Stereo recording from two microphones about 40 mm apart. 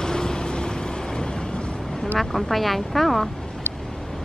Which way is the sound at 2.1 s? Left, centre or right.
Centre.